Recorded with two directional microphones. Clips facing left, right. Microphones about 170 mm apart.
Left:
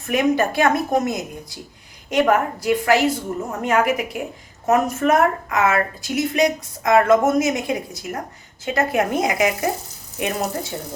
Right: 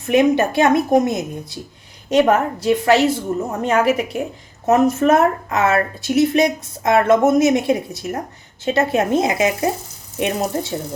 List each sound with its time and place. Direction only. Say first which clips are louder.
0.1 s a woman's voice: right 4 dB; 20° right (ahead or behind)